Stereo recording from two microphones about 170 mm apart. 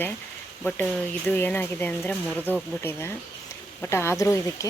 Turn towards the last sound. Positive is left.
turn(degrees=20)  # may be behind; listen again after turning